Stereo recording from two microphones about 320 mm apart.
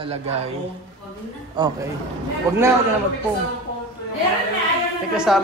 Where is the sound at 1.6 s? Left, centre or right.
Centre.